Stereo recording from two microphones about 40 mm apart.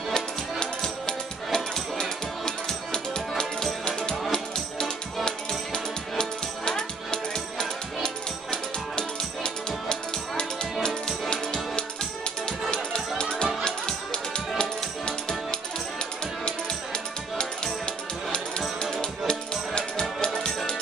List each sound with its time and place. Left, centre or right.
0.1 s music: centre
13.2 s music: left
16.4 s music: left
18.8 s music: left